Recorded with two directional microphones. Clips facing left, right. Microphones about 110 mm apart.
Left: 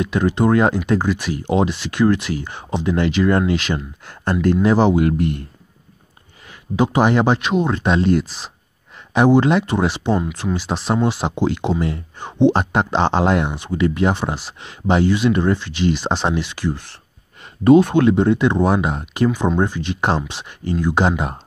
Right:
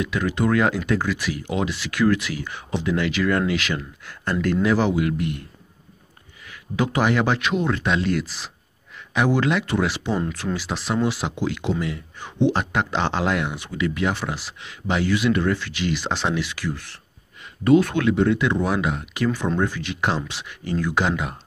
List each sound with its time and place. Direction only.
0.0 s speech: 30° left (ahead or behind)
4.9 s speech: 40° left (ahead or behind)
6.4 s speech: 25° left (ahead or behind)
19.3 s speech: 20° left (ahead or behind)